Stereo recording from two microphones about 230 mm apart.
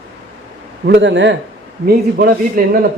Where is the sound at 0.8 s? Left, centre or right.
Right.